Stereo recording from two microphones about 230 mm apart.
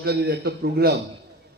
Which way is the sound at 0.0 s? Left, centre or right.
Right.